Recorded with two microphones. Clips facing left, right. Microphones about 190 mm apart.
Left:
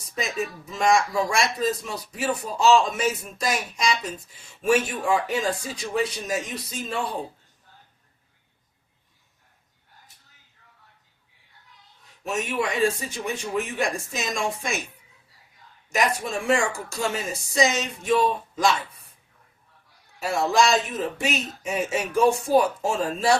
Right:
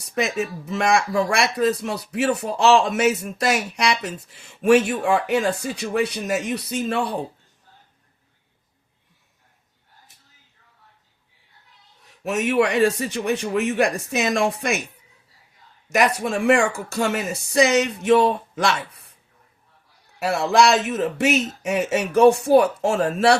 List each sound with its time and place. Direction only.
0.0 s speech: 70° right (ahead or behind)
12.3 s speech: 70° right (ahead or behind)
15.9 s speech: 65° right (ahead or behind)
20.1 s speech: 65° right (ahead or behind)
21.8 s speech: 70° right (ahead or behind)